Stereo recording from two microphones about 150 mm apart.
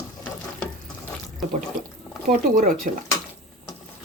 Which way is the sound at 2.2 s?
65° right (ahead or behind).